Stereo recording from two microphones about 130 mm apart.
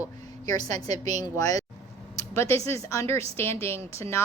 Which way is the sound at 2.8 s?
20° left (ahead or behind).